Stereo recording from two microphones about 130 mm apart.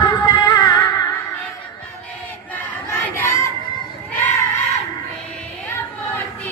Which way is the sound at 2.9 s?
20° left (ahead or behind).